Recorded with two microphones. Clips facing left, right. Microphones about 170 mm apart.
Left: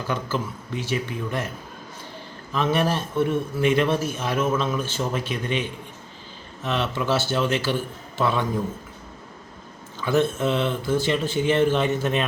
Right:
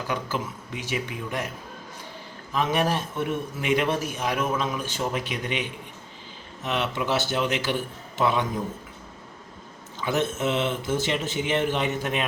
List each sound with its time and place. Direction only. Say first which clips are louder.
0.1 s speech: left 3 dB; 15° right (ahead or behind)
2.5 s speech: left 2 dB; 15° right (ahead or behind)
10.0 s speech: left 4 dB; 20° right (ahead or behind)